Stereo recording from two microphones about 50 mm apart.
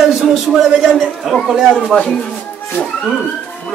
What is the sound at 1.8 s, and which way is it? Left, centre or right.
Speech, centre.